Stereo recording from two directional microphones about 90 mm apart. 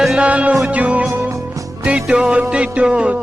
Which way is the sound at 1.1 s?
35° right (ahead or behind).